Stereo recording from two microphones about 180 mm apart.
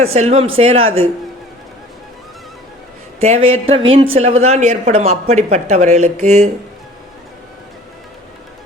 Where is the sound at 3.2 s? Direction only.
35° right (ahead or behind).